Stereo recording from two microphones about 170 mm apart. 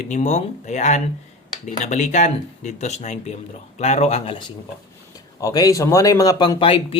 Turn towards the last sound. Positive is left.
turn(degrees=30)  # may be behind; listen again after turning